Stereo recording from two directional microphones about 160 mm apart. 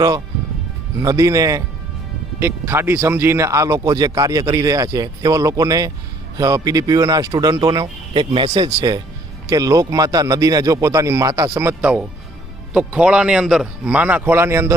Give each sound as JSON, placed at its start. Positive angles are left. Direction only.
{"t": 0.9, "sound": "a man's voice", "side_deg": -20}